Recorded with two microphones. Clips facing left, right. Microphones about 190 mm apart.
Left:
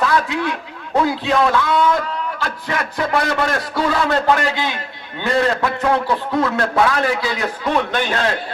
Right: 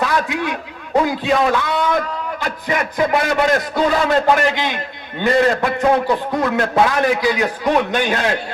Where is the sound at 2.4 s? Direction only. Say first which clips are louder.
Right 6 dB; 15° right (ahead or behind).